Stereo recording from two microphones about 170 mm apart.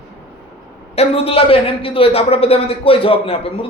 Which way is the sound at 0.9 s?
35° left (ahead or behind).